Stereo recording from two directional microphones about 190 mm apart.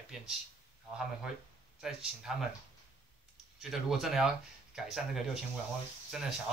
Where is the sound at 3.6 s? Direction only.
Centre (ahead or behind).